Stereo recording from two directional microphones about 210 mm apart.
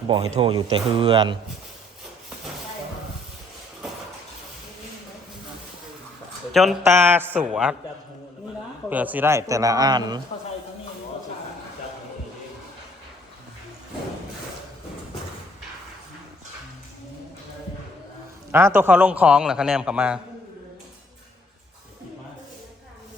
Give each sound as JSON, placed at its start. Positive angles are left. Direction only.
{"t": 0.3, "sound": "a man's voice", "side_deg": -25}
{"t": 6.5, "sound": "speech", "side_deg": 0}
{"t": 6.8, "sound": "a man's voice", "side_deg": -10}
{"t": 8.9, "sound": "a man's voice", "side_deg": -10}
{"t": 18.5, "sound": "a man's voice", "side_deg": -10}